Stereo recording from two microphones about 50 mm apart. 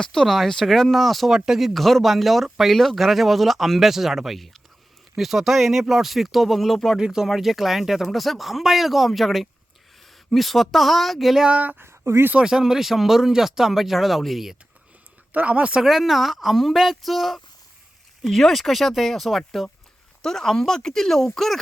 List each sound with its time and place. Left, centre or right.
0.0 s speech: centre
7.0 s speech: centre
11.4 s speech: right
11.8 s a sound: right
12.4 s speech: centre
15.3 s speech: right
15.8 s speech: centre